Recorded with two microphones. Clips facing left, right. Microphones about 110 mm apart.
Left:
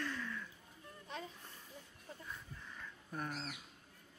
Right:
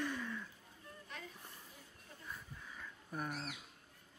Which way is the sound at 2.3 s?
5° right (ahead or behind).